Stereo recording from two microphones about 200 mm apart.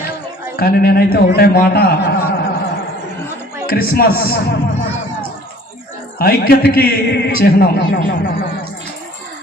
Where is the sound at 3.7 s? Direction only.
50° left (ahead or behind).